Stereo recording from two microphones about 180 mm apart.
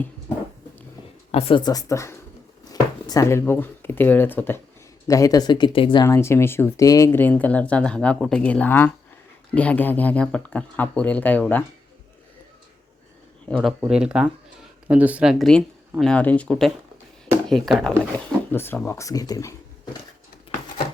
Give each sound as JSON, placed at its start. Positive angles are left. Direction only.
{"t": 1.3, "sound": "speech", "side_deg": 35}
{"t": 6.1, "sound": "speech", "side_deg": 15}
{"t": 13.5, "sound": "speech", "side_deg": 0}
{"t": 18.5, "sound": "speech", "side_deg": 10}